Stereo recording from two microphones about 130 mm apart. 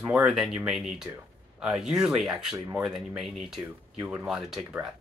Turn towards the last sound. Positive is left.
turn(degrees=-5)  # may be behind; listen again after turning